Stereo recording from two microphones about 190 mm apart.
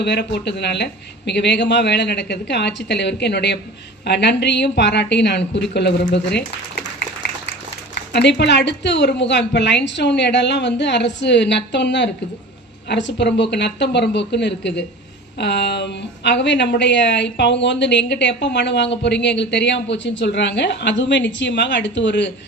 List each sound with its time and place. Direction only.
0.0 s a woman's voice: 65° left (ahead or behind)
8.1 s a woman's voice: 65° left (ahead or behind)